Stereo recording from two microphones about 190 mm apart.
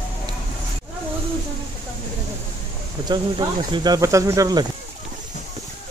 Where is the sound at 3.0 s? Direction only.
25° right (ahead or behind).